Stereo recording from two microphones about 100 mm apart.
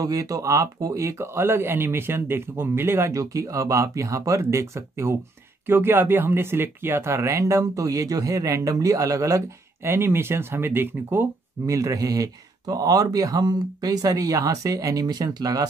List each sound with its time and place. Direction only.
0.0 s speech: 35° right (ahead or behind)
11.7 s speech: 35° right (ahead or behind)